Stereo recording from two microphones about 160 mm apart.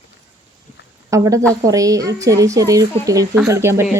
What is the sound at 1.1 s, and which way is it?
Speech, 20° right (ahead or behind).